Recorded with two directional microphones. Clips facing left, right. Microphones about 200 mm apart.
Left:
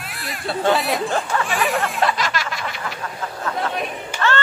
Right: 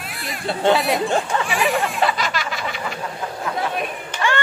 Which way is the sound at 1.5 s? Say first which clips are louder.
Right 2 dB; centre (ahead or behind).